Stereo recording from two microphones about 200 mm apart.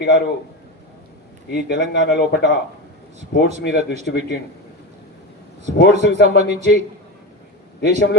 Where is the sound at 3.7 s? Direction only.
55° left (ahead or behind).